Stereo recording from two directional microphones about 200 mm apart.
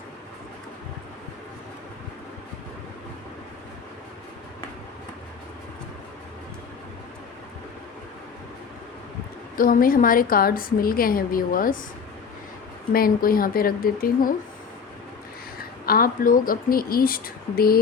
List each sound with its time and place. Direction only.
9.6 s a woman's voice: 45° left (ahead or behind)
12.9 s a woman's voice: 45° left (ahead or behind)
15.9 s a woman's voice: 45° left (ahead or behind)